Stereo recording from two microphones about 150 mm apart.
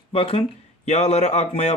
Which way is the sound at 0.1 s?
40° left (ahead or behind).